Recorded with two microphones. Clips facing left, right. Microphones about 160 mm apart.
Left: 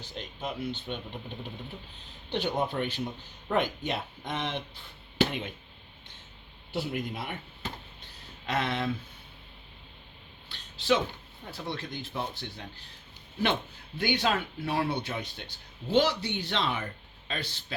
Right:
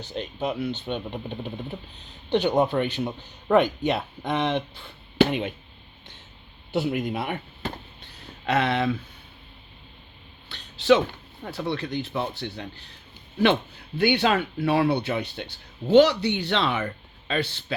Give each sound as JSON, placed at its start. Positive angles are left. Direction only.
{"t": 0.0, "sound": "speech", "side_deg": -70}
{"t": 2.3, "sound": "speech", "side_deg": -70}
{"t": 6.7, "sound": "speech", "side_deg": -70}
{"t": 10.5, "sound": "a sound", "side_deg": -75}
{"t": 11.4, "sound": "speech", "side_deg": -70}
{"t": 14.0, "sound": "speech", "side_deg": -70}